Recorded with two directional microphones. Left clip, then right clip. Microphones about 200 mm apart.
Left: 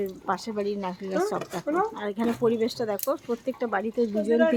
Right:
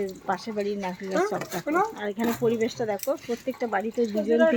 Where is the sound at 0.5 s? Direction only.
10° left (ahead or behind).